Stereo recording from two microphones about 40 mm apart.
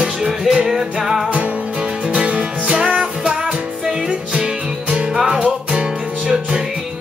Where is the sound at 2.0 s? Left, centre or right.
Right.